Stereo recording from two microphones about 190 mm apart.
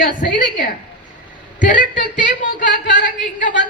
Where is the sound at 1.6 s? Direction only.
45° left (ahead or behind).